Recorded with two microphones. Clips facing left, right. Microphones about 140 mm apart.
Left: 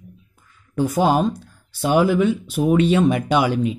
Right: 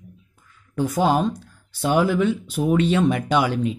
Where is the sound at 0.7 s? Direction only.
10° left (ahead or behind).